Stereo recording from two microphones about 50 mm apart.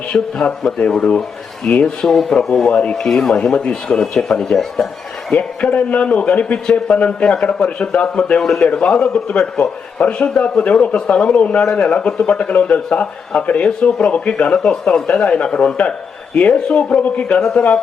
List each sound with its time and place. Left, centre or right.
0.1 s a man's voice: centre
2.0 s speech: centre
2.6 s speech: left
2.9 s speech: centre
5.3 s a man's voice: left